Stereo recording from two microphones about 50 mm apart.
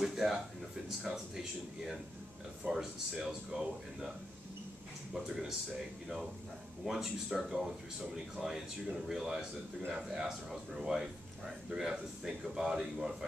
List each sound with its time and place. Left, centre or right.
0.0 s a sound: centre
0.8 s speech: centre
2.6 s speech: right
3.3 s speech: centre
5.1 s speech: centre
6.8 s speech: centre